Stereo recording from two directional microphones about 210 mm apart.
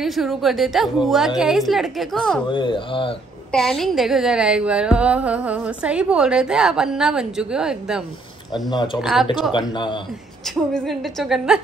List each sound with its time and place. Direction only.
0.0 s a woman's voice: centre (ahead or behind)
2.4 s speech: 25° left (ahead or behind)
3.5 s a woman's voice: centre (ahead or behind)
8.6 s speech: 20° left (ahead or behind)
9.0 s a woman's voice: centre (ahead or behind)
9.5 s speech: 20° left (ahead or behind)
10.5 s a woman's voice: centre (ahead or behind)